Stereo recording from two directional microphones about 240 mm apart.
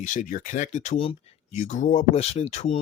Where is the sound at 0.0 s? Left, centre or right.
Left.